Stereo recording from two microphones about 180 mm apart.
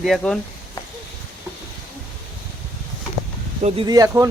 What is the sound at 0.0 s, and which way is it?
Speech, centre (ahead or behind).